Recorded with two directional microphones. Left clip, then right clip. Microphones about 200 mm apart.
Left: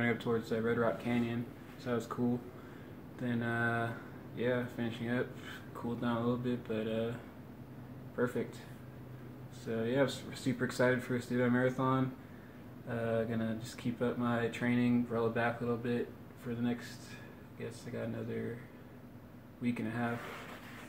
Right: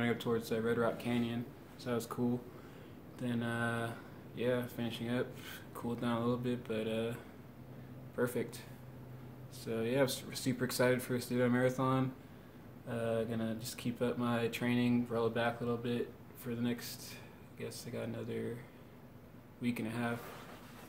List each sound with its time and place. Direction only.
0.0 s speech: 5° right (ahead or behind)
8.2 s speech: 10° right (ahead or behind)
9.7 s speech: 5° right (ahead or behind)
19.6 s speech: 10° right (ahead or behind)